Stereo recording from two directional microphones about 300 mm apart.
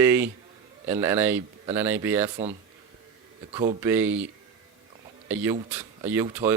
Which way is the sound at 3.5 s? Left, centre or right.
Centre.